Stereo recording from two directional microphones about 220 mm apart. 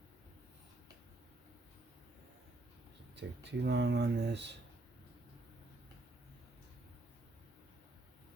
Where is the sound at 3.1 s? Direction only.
50° right (ahead or behind).